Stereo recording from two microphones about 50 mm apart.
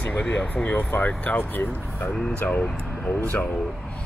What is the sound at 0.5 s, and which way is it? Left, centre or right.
Speech, left.